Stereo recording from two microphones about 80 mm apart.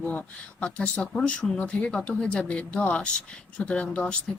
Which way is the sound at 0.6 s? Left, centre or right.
Centre.